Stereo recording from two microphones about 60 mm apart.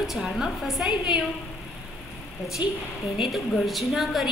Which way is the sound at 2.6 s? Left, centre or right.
Right.